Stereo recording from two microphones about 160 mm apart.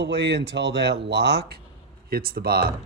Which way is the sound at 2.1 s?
70° right (ahead or behind).